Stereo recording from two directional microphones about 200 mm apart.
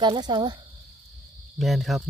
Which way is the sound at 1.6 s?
Centre (ahead or behind).